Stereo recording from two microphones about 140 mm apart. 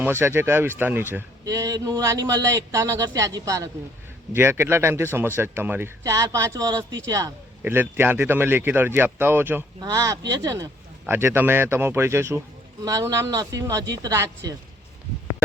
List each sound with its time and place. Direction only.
0.0 s speech: 15° right (ahead or behind)
1.5 s a man's voice: 25° right (ahead or behind)